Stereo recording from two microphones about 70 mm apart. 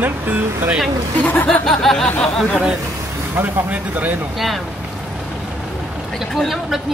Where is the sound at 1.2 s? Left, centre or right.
Centre.